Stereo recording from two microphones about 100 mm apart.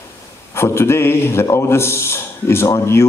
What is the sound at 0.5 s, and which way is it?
A man's voice, 25° left (ahead or behind).